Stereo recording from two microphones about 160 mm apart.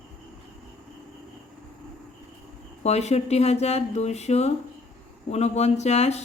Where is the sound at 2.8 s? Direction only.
45° left (ahead or behind).